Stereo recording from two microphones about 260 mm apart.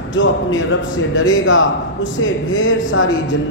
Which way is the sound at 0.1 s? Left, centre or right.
Left.